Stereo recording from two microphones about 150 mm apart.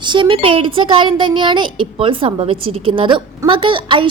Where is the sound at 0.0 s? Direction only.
30° right (ahead or behind).